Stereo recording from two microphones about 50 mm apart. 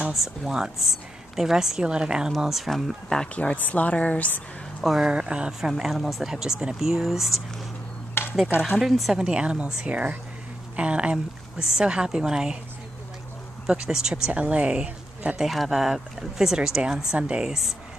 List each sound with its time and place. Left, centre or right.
0.1 s a woman's voice: centre
2.3 s speech: centre
3.3 s speech: left
5.0 s speech: centre
5.6 s a woman's voice: centre
8.1 s a sound: left
8.5 s a woman's voice: centre
9.2 s speech: right
10.8 s a woman's voice: right
13.7 s a woman's voice: centre
14.3 s a woman's voice: right
15.3 s a woman's voice: centre
17.5 s a woman's voice: centre